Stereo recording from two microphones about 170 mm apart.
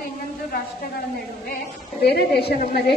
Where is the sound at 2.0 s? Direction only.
75° left (ahead or behind).